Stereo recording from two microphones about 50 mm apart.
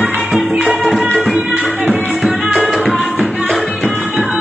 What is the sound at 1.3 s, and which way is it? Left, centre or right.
Music, right.